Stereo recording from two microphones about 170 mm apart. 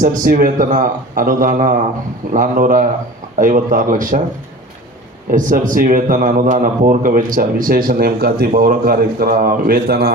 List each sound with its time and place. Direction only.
0.0 s a man's voice: 50° right (ahead or behind)
5.3 s speech: 50° right (ahead or behind)